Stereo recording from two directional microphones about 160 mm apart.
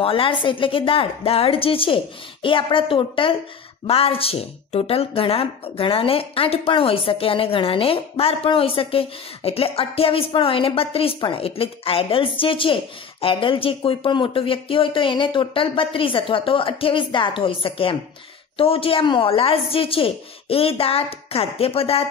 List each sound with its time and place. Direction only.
0.0 s a woman's voice: 35° left (ahead or behind)